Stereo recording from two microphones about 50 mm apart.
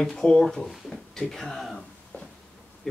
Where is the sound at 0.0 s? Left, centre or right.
Centre.